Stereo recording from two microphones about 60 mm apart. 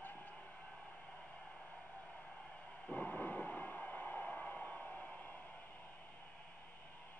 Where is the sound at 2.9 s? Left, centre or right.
Left.